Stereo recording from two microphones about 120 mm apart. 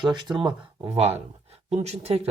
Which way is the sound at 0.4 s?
30° right (ahead or behind).